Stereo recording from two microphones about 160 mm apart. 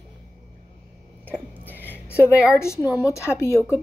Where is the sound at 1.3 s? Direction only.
10° left (ahead or behind).